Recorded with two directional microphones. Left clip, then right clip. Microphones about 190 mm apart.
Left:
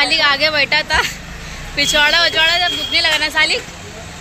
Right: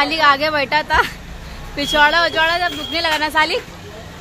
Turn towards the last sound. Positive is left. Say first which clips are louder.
# left 1 dB
turn(degrees=-35)  # may be behind; listen again after turning